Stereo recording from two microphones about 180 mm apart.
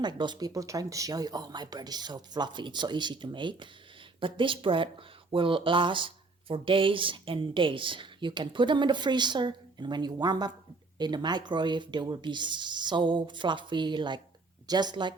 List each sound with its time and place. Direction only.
0.0 s speech: 25° right (ahead or behind)